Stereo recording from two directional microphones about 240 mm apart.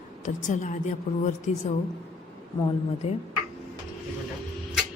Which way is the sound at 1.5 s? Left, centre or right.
Left.